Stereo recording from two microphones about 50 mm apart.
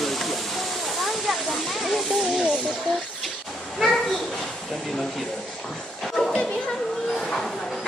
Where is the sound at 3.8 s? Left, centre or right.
Centre.